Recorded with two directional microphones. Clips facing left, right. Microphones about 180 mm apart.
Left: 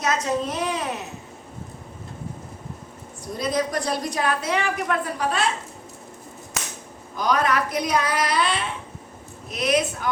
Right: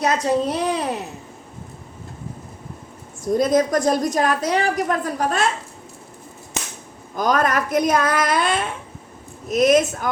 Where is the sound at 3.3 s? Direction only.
45° right (ahead or behind).